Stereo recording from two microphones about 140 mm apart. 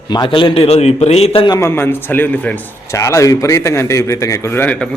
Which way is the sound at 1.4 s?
30° left (ahead or behind).